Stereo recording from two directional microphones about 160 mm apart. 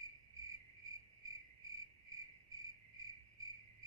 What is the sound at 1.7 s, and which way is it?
Cricket, 20° right (ahead or behind).